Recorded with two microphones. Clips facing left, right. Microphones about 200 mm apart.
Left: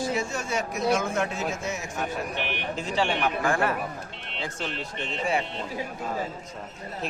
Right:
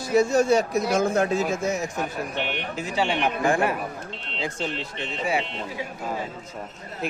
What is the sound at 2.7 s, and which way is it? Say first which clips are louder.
Speech: right 1 dB; 10° right (ahead or behind).